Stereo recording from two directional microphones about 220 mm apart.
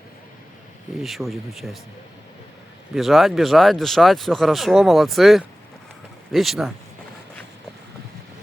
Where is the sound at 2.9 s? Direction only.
Centre (ahead or behind).